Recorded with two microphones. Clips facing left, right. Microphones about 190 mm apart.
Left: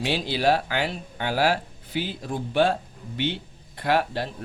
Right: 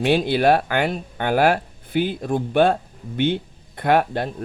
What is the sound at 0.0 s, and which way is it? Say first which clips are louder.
Speech: right 6 dB; 55° right (ahead or behind).